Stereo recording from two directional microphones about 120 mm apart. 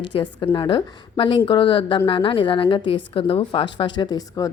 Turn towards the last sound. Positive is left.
turn(degrees=35)  # may be behind; listen again after turning